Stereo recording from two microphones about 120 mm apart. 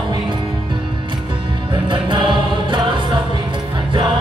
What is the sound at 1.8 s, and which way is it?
Music, 45° right (ahead or behind).